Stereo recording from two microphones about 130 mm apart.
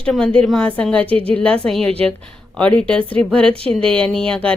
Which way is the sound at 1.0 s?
45° right (ahead or behind).